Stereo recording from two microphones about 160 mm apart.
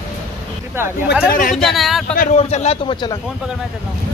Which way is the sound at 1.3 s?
60° left (ahead or behind).